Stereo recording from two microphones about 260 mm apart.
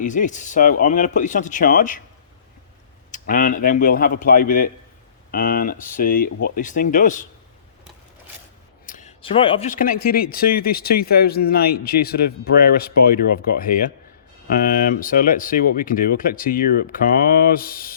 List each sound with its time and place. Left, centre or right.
0.0 s speech: left
3.1 s speech: left
8.9 s speech: left